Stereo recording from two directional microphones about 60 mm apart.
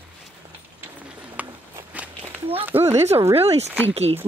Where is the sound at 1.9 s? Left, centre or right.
Right.